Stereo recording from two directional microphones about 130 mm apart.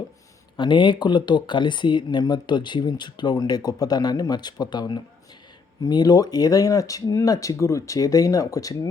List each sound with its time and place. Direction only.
0.5 s speech: 40° left (ahead or behind)